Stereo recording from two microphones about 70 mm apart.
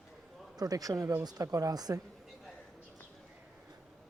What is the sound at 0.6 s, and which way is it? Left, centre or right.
Speech, right.